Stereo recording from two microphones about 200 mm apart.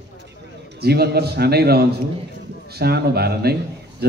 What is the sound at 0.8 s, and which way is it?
Speech, 55° right (ahead or behind).